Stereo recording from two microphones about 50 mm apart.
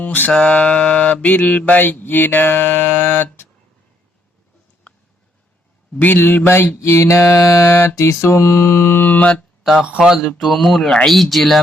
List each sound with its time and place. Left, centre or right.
0.0 s mantra: left
0.3 s mantra: left
4.9 s a sound: left
6.0 s mantra: left
6.8 s music: left
7.9 s music: left
9.0 s mantra: left
9.8 s speech: right
10.4 s speech: centre
10.8 s speech: centre
11.1 s speech: centre